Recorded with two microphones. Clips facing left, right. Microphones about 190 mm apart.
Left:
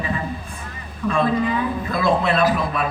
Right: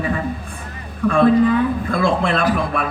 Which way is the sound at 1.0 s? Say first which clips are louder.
Right 6 dB; 55° right (ahead or behind).